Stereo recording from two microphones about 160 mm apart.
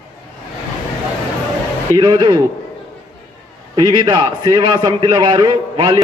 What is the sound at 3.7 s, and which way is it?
A man's voice, 30° right (ahead or behind).